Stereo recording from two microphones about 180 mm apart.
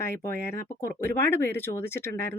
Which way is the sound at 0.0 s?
15° left (ahead or behind).